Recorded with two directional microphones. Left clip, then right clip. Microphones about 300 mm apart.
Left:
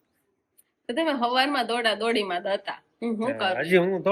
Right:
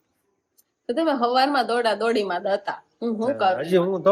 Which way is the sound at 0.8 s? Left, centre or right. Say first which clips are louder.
Right 3 dB; centre.